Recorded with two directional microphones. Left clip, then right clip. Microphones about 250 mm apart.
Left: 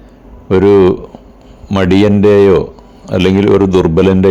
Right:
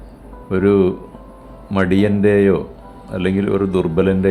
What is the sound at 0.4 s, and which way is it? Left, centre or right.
A man's voice, left.